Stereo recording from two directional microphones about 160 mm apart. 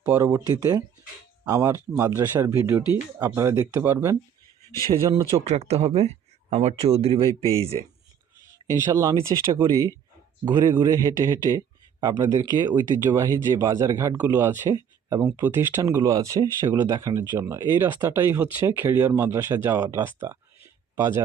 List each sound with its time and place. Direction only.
0.2 s speech: 20° right (ahead or behind)
5.5 s speech: 40° right (ahead or behind)
8.6 s speech: 15° right (ahead or behind)